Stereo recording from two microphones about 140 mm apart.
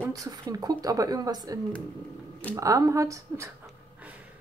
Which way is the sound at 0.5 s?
25° right (ahead or behind).